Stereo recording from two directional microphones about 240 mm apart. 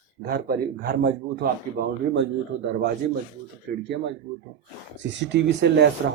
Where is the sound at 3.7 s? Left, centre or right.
Right.